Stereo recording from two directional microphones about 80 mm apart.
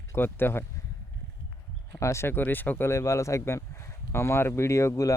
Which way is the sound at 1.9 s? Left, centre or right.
Left.